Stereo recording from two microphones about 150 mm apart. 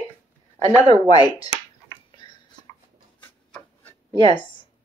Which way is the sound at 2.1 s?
30° left (ahead or behind).